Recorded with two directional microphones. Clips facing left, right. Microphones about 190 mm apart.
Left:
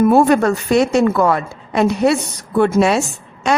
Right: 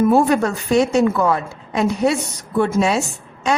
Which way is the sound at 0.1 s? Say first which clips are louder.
Left 3 dB; 65° left (ahead or behind).